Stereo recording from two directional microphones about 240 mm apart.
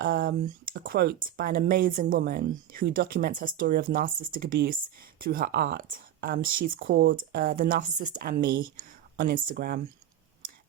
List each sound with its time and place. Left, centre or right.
0.0 s speech: right